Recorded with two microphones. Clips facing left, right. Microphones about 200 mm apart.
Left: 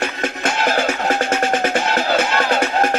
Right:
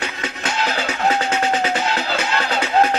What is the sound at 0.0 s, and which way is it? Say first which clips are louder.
Music: left 5 dB; 50° left (ahead or behind).